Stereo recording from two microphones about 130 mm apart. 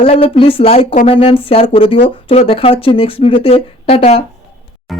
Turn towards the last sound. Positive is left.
turn(degrees=50)  # may be behind; listen again after turning